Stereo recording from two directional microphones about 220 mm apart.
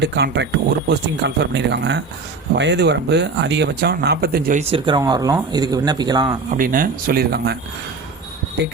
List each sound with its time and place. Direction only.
0.0 s speech: 50° right (ahead or behind)
4.6 s speech: 25° right (ahead or behind)
6.5 s speech: 40° right (ahead or behind)